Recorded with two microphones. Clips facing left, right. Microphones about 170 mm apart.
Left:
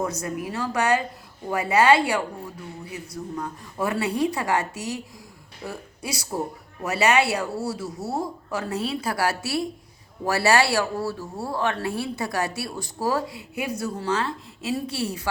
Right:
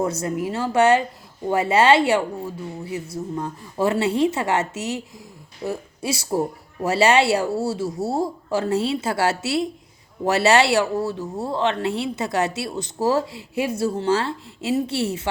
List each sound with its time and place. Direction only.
0.0 s a woman's voice: 25° right (ahead or behind)